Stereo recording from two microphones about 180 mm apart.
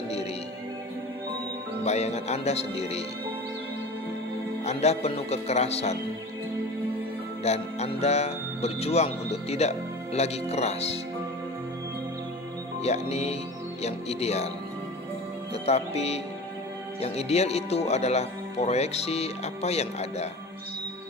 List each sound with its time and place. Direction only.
1.8 s speech: 40° left (ahead or behind)
4.6 s speech: 35° left (ahead or behind)
7.4 s speech: 35° left (ahead or behind)
12.8 s speech: 35° left (ahead or behind)
15.6 s speech: 35° left (ahead or behind)